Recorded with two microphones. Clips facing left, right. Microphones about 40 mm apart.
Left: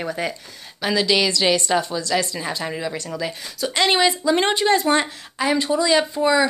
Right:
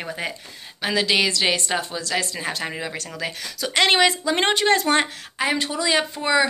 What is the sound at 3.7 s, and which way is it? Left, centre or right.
Speech, right.